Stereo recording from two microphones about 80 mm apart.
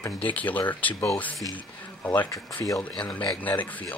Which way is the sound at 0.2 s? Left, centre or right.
Centre.